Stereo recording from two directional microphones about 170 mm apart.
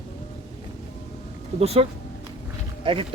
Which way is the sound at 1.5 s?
35° right (ahead or behind).